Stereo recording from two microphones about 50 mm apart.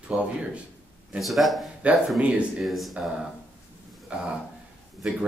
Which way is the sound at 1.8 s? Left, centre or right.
Right.